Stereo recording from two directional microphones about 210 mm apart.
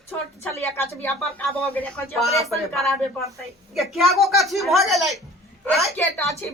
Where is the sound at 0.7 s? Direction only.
10° left (ahead or behind).